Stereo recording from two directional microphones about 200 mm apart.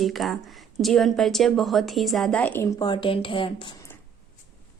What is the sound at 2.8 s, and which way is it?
Speech, 25° left (ahead or behind).